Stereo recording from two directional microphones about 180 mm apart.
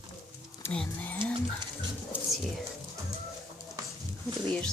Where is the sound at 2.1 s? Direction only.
10° right (ahead or behind).